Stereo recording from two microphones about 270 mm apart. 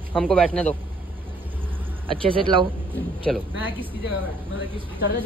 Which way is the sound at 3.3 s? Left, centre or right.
Centre.